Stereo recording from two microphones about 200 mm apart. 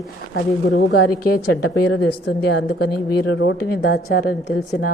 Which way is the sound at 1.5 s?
60° left (ahead or behind).